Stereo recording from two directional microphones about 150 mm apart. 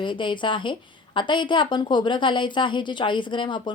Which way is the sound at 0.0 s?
30° left (ahead or behind).